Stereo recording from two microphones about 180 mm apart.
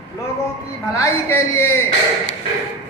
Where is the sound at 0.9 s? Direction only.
15° left (ahead or behind).